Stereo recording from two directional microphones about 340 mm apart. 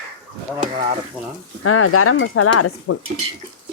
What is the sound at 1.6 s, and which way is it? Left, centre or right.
Speech, left.